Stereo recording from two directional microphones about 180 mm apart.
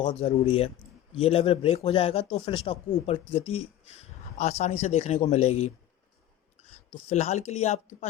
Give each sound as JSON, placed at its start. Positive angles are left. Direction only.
{"t": 0.0, "sound": "speech", "side_deg": 25}
{"t": 7.1, "sound": "speech", "side_deg": 35}